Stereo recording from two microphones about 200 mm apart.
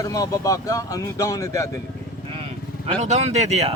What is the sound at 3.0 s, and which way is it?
Speech, 35° right (ahead or behind).